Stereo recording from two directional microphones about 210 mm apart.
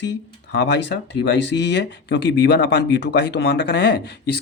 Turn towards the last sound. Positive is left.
turn(degrees=50)  # may be behind; listen again after turning